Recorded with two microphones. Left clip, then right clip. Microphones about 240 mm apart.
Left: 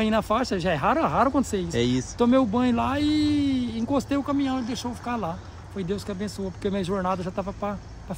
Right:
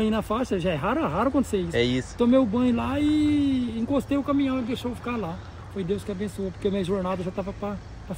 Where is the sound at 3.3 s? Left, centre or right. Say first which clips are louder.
Right 1 dB; centre.